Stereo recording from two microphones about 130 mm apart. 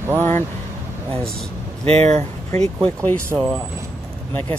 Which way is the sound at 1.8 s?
55° right (ahead or behind).